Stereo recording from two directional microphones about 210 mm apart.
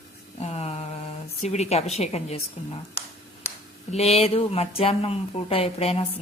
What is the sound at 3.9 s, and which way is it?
Speech, 30° left (ahead or behind).